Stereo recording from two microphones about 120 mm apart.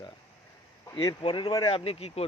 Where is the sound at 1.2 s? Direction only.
40° left (ahead or behind).